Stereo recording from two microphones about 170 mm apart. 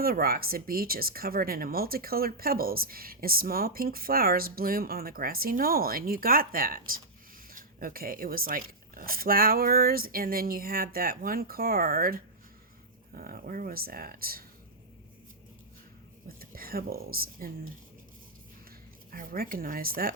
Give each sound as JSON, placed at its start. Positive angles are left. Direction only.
{"t": 0.0, "sound": "speech", "side_deg": -60}
{"t": 16.4, "sound": "speech", "side_deg": -60}
{"t": 19.1, "sound": "speech", "side_deg": -55}